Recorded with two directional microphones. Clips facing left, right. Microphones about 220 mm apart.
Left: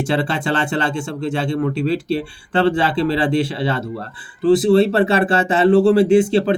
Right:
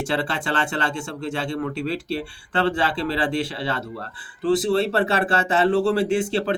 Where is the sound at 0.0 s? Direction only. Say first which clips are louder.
Left 5 dB; 20° left (ahead or behind).